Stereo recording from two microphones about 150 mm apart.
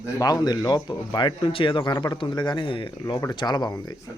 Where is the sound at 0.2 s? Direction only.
25° left (ahead or behind).